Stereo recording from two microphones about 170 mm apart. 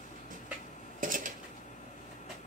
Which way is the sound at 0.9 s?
50° right (ahead or behind).